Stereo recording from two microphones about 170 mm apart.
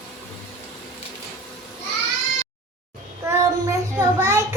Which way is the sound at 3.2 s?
20° right (ahead or behind).